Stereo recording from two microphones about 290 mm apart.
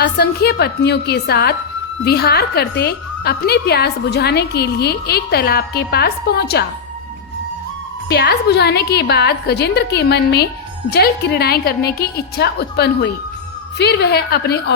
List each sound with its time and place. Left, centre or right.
0.0 s a woman's voice: left
8.1 s a woman's voice: left